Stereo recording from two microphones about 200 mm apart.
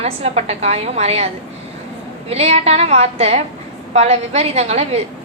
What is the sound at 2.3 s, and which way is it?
A woman's voice, 30° right (ahead or behind).